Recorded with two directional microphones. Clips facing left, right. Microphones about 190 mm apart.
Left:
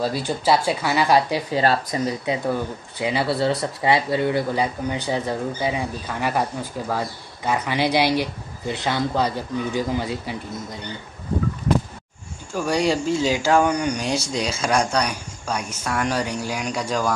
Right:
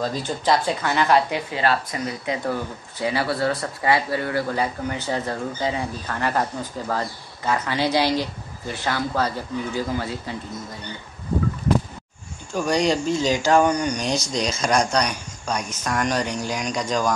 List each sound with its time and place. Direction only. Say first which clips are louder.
0.0 s speech: left 2 dB; 10° left (ahead or behind)
1.3 s speech: left 2 dB; 35° left (ahead or behind)
3.0 s speech: left 1 dB; 20° left (ahead or behind)
12.5 s speech: even; 5° left (ahead or behind)